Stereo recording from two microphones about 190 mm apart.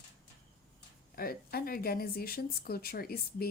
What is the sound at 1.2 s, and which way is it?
Speech, 50° left (ahead or behind).